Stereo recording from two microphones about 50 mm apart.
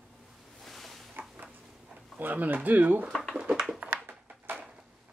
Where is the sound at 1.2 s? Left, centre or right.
Right.